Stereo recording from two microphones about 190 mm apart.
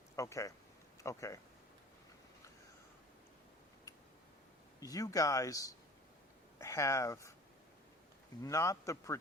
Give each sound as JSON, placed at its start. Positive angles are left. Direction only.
{"t": 0.2, "sound": "speech", "side_deg": 15}
{"t": 4.8, "sound": "speech", "side_deg": 15}
{"t": 8.4, "sound": "speech", "side_deg": 15}